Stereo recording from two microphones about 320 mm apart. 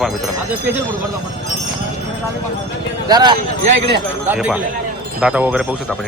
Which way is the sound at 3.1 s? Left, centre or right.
Centre.